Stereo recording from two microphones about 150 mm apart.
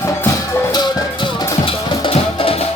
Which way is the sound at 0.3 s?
25° left (ahead or behind).